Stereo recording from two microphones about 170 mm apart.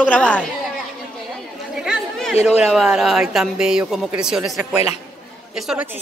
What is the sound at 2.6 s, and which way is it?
Speech, 5° right (ahead or behind).